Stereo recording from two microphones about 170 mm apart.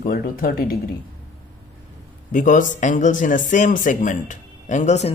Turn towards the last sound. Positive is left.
turn(degrees=40)  # may be behind; listen again after turning